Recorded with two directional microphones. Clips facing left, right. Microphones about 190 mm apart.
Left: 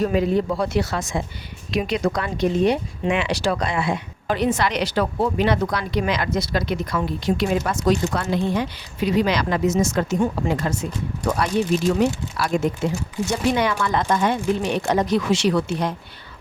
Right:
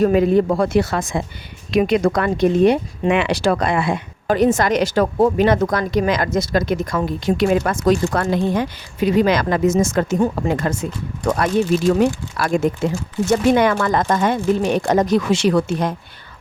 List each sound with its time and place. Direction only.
0.0 s speech: 55° right (ahead or behind)
11.9 s speech: 50° right (ahead or behind)